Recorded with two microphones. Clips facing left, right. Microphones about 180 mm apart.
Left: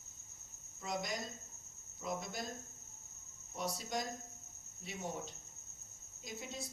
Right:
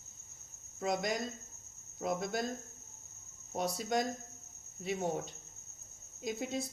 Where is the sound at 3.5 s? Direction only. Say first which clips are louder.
Right 7 dB; 60° right (ahead or behind).